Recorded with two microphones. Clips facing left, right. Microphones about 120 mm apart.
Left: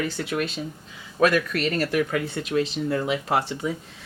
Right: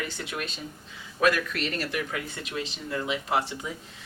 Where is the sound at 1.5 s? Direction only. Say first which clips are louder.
Left 7 dB; 45° left (ahead or behind).